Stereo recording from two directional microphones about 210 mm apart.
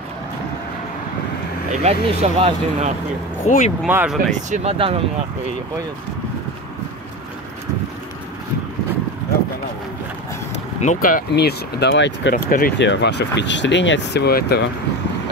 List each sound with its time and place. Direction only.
1.7 s speech: 30° right (ahead or behind)
3.4 s speech: 35° left (ahead or behind)
3.8 s speech: 5° right (ahead or behind)
4.3 s speech: 30° right (ahead or behind)
10.8 s speech: 40° left (ahead or behind)